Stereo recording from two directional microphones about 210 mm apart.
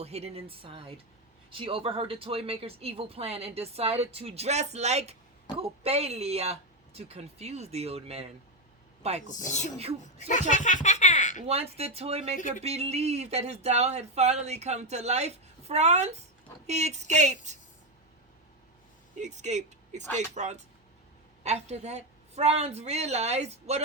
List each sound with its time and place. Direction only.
0.0 s speech: 30° right (ahead or behind)
9.4 s speech: 35° left (ahead or behind)
10.2 s a sound: 35° left (ahead or behind)
11.4 s speech: 30° right (ahead or behind)
12.4 s speech: 40° left (ahead or behind)
12.6 s speech: 30° right (ahead or behind)
19.2 s speech: 35° right (ahead or behind)